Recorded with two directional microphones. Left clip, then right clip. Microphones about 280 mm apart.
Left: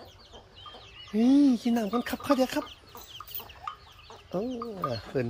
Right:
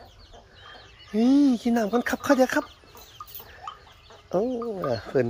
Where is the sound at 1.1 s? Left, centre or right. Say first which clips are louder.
Right 2 dB; centre.